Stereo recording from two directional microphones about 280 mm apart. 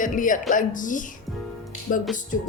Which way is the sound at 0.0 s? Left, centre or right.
Left.